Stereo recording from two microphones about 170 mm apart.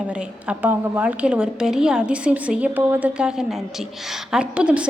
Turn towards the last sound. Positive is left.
turn(degrees=-5)  # may be behind; listen again after turning